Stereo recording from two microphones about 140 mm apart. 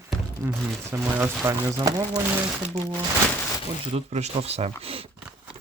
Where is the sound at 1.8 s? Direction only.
25° right (ahead or behind).